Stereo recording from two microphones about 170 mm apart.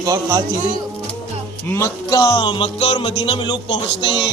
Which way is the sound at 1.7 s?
20° left (ahead or behind).